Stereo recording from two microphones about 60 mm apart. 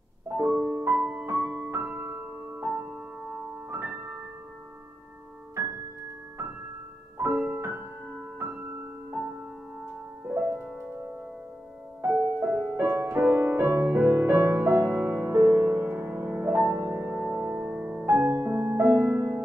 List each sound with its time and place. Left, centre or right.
0.3 s music: right
0.9 s music: centre
1.6 s music: right
7.3 s music: right
12.0 s music: right
17.0 s music: right
18.0 s music: right
18.7 s music: right